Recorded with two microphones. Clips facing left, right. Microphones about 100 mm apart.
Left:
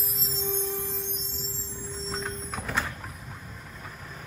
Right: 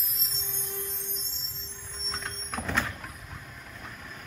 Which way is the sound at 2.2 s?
10° left (ahead or behind).